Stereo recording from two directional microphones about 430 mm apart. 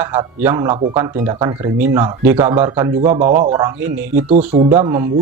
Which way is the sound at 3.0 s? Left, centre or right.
Centre.